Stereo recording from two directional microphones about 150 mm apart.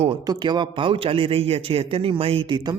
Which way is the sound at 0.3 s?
30° right (ahead or behind).